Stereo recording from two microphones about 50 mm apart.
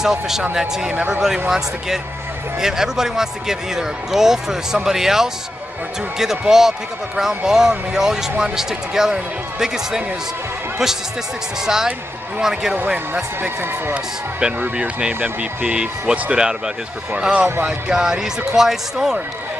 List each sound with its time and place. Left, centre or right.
0.0 s speech: centre
2.6 s speech: centre
11.6 s speech: centre
12.7 s speech: right
13.6 s speech: right
14.4 s speech: right
17.6 s speech: centre